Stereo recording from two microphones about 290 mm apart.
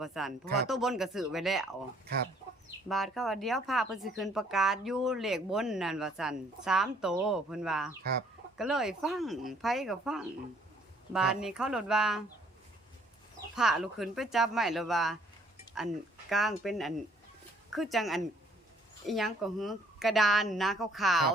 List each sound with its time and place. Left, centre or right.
0.0 s speech: centre
0.4 s speech: right
0.7 s speech: centre
2.9 s speech: centre
13.6 s speech: centre
16.3 s speech: centre